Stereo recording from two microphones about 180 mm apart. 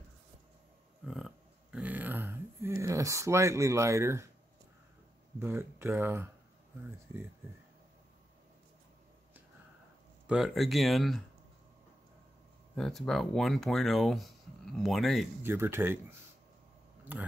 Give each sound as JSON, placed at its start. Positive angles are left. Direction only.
{"t": 1.0, "sound": "a sound", "side_deg": 0}
{"t": 2.8, "sound": "speech", "side_deg": -15}
{"t": 5.4, "sound": "speech", "side_deg": -15}
{"t": 10.2, "sound": "speech", "side_deg": 0}
{"t": 12.7, "sound": "speech", "side_deg": 5}
{"t": 15.4, "sound": "speech", "side_deg": -15}